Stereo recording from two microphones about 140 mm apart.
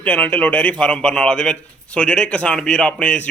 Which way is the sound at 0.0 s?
10° left (ahead or behind).